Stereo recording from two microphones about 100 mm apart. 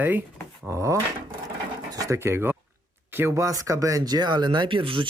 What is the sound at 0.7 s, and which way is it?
Speech, 30° right (ahead or behind).